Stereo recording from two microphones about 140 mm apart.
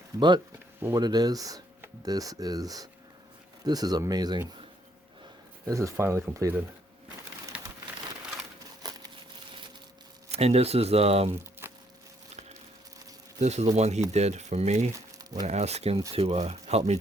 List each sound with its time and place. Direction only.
0.2 s speech: 30° right (ahead or behind)
5.6 s speech: 20° right (ahead or behind)
7.5 s a sound: 10° right (ahead or behind)
8.8 s crumpling: 30° right (ahead or behind)
10.3 s speech: 45° right (ahead or behind)
11.6 s a sound: 15° right (ahead or behind)
13.4 s speech: 55° right (ahead or behind)
14.9 s crumpling: 25° right (ahead or behind)
15.4 s speech: 50° right (ahead or behind)